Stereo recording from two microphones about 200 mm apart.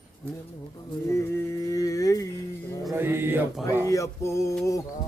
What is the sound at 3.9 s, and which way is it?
Music, 15° left (ahead or behind).